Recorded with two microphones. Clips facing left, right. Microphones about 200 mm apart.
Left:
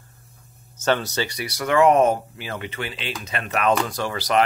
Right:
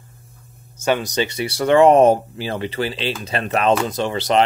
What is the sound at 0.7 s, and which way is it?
Speech, 10° right (ahead or behind).